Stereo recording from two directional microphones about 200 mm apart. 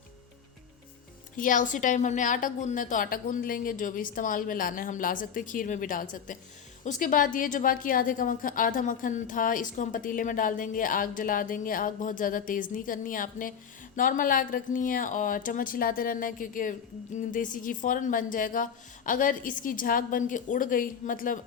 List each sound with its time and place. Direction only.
1.4 s a woman's voice: 40° left (ahead or behind)